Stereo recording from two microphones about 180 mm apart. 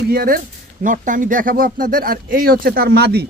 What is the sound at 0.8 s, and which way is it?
Speech, 45° right (ahead or behind).